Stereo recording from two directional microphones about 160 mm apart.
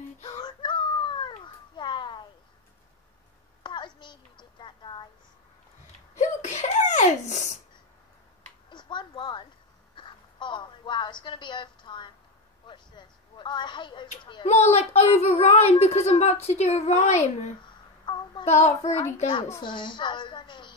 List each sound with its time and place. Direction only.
0.3 s a sound: 30° left (ahead or behind)
3.6 s a sound: 30° left (ahead or behind)
6.1 s sneeze: 50° left (ahead or behind)
8.6 s a sound: 30° left (ahead or behind)
14.5 s child singing: 45° left (ahead or behind)
16.4 s a woman's voice: 40° left (ahead or behind)
18.1 s child singing: 30° left (ahead or behind)
18.4 s a woman's voice: 45° left (ahead or behind)
19.6 s a woman's voice: 30° left (ahead or behind)